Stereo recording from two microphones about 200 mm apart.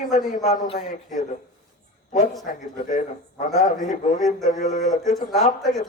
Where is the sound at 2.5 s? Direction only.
45° left (ahead or behind).